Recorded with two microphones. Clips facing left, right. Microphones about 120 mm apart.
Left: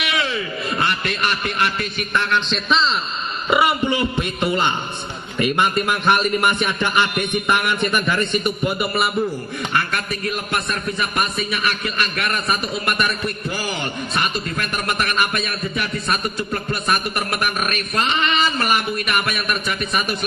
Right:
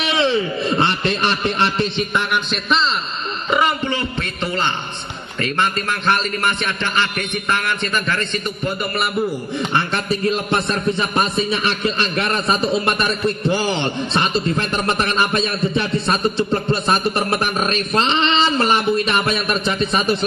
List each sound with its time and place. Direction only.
0.0 s speech: 30° right (ahead or behind)
2.5 s a man's voice: centre (ahead or behind)
3.4 s a man's voice: 10° left (ahead or behind)
9.8 s a man's voice: 25° right (ahead or behind)